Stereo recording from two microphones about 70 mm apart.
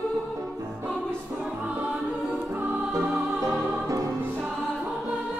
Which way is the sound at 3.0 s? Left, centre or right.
Right.